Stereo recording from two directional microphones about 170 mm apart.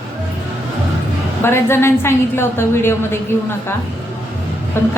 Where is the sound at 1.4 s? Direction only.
15° left (ahead or behind).